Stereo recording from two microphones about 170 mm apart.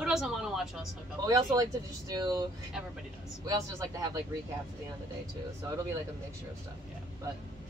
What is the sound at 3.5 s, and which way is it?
Speech, 20° right (ahead or behind).